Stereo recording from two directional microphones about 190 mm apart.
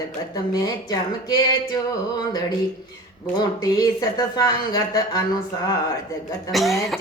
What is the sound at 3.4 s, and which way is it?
A woman's voice, 20° left (ahead or behind).